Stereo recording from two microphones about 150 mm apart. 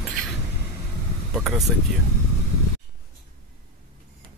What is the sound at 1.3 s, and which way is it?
Speech, centre (ahead or behind).